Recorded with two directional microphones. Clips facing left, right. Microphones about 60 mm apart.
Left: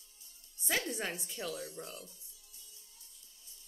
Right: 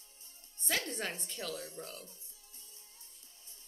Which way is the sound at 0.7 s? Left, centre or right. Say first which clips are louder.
Left 1 dB; centre.